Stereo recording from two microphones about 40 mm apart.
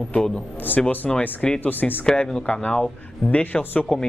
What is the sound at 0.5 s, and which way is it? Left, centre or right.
Speech, left.